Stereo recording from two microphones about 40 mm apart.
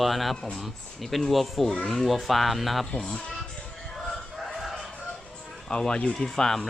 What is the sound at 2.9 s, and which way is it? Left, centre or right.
Speech, centre.